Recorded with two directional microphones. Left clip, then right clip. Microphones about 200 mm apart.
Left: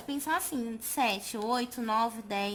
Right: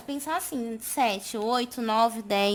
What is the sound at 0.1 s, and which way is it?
A woman's voice, 30° right (ahead or behind).